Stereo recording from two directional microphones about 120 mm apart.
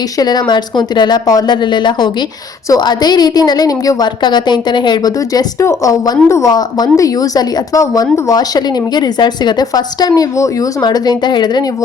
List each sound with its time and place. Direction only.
0.2 s a woman's voice: 35° left (ahead or behind)